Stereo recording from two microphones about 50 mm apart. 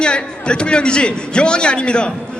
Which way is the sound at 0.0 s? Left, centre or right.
Centre.